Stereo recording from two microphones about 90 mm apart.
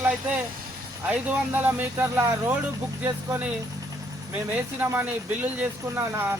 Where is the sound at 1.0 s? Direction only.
20° right (ahead or behind).